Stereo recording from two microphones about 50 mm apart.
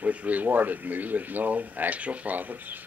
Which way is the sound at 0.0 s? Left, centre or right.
Right.